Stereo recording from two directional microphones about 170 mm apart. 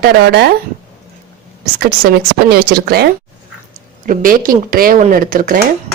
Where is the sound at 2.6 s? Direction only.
65° right (ahead or behind).